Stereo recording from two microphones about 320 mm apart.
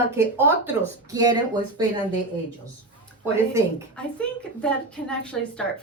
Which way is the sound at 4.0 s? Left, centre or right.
Centre.